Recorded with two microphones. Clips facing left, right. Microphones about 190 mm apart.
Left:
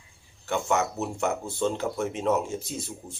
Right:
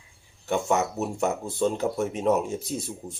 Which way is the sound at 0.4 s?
20° right (ahead or behind).